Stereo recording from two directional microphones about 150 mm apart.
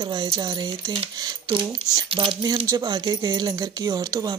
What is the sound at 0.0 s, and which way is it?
Speech, 30° right (ahead or behind).